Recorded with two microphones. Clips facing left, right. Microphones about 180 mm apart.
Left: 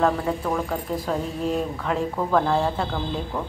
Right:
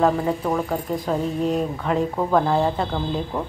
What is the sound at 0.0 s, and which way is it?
Speech, 10° right (ahead or behind).